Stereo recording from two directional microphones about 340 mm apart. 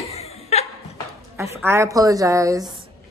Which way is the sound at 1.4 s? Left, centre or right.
Centre.